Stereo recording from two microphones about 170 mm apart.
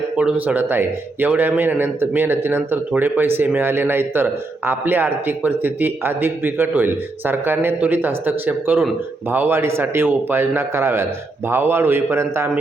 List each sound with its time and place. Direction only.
0.2 s a man's voice: 10° right (ahead or behind)